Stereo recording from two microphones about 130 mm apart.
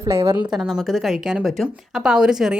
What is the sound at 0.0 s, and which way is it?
Speech, 20° right (ahead or behind).